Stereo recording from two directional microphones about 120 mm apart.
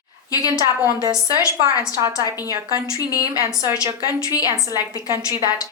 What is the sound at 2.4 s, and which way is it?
A woman's voice, 30° left (ahead or behind).